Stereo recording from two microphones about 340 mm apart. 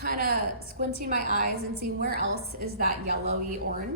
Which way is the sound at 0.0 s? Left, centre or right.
Right.